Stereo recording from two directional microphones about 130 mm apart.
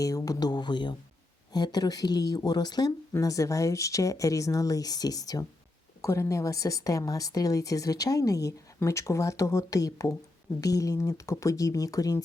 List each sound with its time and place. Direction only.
0.0 s a woman's voice: 25° left (ahead or behind)